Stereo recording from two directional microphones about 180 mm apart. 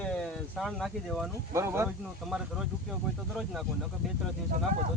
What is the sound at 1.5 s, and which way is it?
Speech, 15° right (ahead or behind).